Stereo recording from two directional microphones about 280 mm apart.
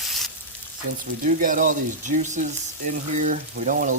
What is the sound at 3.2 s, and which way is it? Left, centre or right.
Speech, right.